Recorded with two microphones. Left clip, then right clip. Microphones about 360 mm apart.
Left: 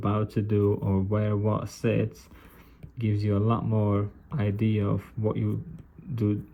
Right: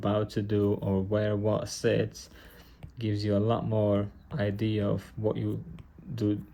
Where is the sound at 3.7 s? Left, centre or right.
Left.